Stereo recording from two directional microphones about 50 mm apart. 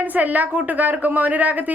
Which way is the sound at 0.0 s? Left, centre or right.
Right.